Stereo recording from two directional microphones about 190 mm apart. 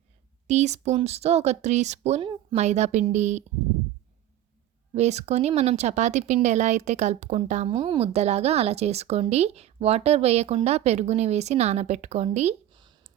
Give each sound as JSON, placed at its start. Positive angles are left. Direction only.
{"t": 0.4, "sound": "speech", "side_deg": -35}
{"t": 4.9, "sound": "speech", "side_deg": -35}